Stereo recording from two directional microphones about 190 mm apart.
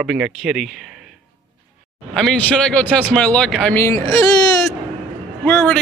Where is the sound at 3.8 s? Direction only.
15° left (ahead or behind).